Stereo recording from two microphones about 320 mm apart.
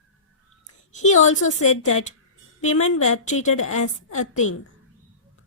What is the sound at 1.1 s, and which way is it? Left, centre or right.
Speech, left.